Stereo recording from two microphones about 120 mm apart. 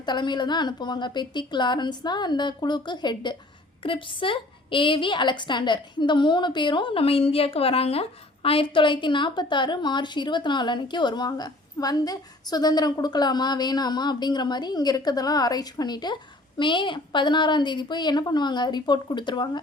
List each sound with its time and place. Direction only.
0.0 s a woman's voice: 40° left (ahead or behind)